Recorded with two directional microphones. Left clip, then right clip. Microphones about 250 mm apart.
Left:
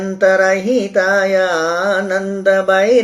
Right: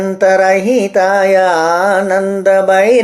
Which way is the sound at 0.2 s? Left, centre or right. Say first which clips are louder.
Right 2 dB; centre.